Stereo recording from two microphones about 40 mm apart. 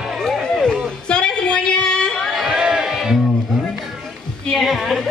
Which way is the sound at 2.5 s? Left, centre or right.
Centre.